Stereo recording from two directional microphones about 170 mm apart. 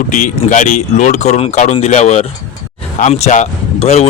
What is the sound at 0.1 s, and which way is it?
Speech, 50° left (ahead or behind).